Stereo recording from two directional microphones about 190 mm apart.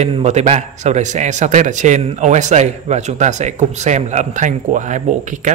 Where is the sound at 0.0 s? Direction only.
35° right (ahead or behind).